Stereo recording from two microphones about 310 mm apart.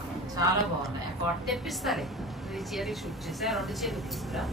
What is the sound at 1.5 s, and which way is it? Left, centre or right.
Speech, centre.